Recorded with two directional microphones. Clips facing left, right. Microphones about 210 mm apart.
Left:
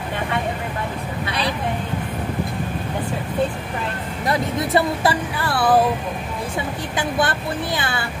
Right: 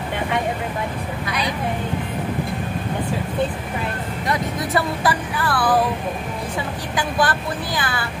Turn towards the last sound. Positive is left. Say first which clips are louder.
# left 1 dB
turn(degrees=25)  # may be behind; listen again after turning